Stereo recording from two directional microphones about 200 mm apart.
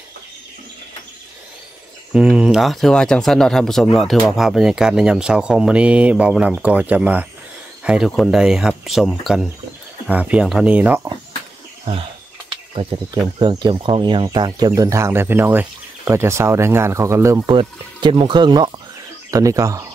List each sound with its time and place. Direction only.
2.1 s speech: 5° right (ahead or behind)
12.7 s speech: 25° right (ahead or behind)